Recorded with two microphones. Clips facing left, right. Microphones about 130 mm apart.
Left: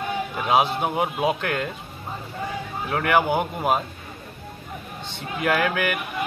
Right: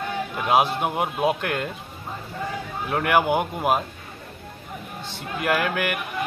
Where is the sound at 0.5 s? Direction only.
5° right (ahead or behind).